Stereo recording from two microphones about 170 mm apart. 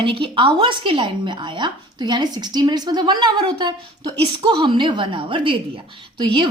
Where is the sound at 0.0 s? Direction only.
30° right (ahead or behind).